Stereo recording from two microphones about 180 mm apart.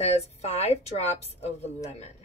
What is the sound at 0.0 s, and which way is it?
A woman's voice, 35° left (ahead or behind).